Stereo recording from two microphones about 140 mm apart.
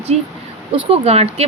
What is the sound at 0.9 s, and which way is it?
Speech, 45° right (ahead or behind).